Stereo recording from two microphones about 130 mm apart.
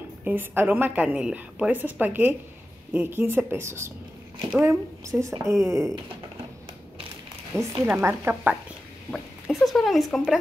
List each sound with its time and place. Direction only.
0.2 s a woman's voice: 15° right (ahead or behind)
7.5 s a woman's voice: 20° right (ahead or behind)
9.1 s a sound: centre (ahead or behind)